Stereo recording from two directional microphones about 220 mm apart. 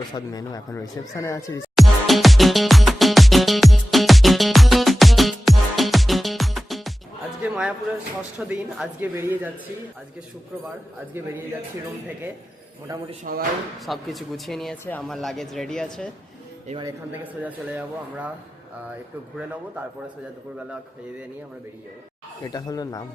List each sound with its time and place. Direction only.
0.1 s speech: 15° left (ahead or behind)
1.7 s music: centre (ahead or behind)
7.4 s a sound: 5° right (ahead or behind)
8.4 s speech: 5° right (ahead or behind)
13.3 s speech: 40° right (ahead or behind)
13.8 s speech: centre (ahead or behind)
16.8 s speech: 10° right (ahead or behind)
22.4 s speech: 15° left (ahead or behind)